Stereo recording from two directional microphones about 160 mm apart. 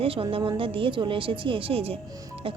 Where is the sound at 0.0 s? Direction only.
35° right (ahead or behind).